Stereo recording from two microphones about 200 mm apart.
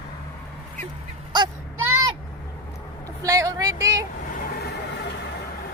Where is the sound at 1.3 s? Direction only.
20° right (ahead or behind).